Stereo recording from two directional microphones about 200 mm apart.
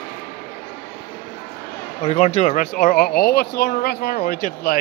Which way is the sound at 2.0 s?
35° left (ahead or behind).